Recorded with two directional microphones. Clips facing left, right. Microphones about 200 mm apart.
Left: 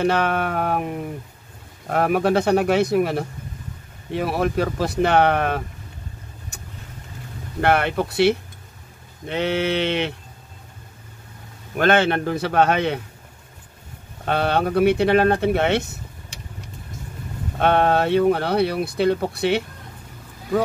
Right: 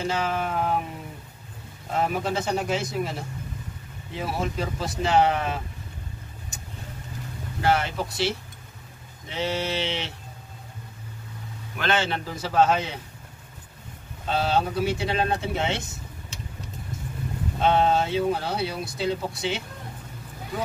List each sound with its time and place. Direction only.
0.0 s speech: 65° left (ahead or behind)
7.6 s speech: 60° left (ahead or behind)
11.7 s speech: 55° left (ahead or behind)
14.2 s speech: 65° left (ahead or behind)
17.6 s speech: 60° left (ahead or behind)